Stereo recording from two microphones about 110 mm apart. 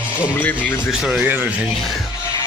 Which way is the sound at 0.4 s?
15° left (ahead or behind).